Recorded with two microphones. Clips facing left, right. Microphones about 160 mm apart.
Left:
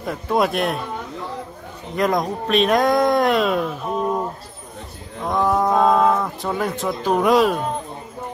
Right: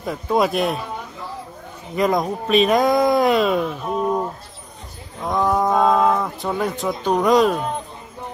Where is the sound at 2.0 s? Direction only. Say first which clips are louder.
Right 1 dB; centre (ahead or behind).